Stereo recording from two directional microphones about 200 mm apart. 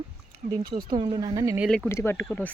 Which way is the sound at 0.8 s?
25° right (ahead or behind).